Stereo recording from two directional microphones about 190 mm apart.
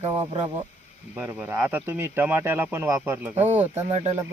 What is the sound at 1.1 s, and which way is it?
Speech, 10° right (ahead or behind).